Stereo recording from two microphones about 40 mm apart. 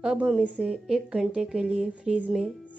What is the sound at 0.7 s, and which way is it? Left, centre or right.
A woman's voice, right.